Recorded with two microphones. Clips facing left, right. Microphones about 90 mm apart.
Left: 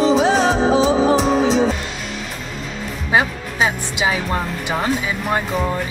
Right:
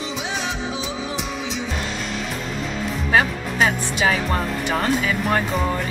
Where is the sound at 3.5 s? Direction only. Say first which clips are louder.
Left 1 dB; 10° left (ahead or behind).